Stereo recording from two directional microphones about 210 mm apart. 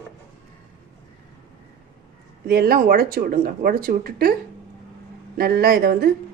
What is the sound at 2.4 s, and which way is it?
Speech, 45° right (ahead or behind).